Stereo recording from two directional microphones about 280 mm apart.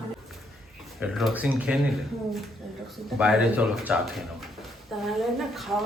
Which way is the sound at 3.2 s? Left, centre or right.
Centre.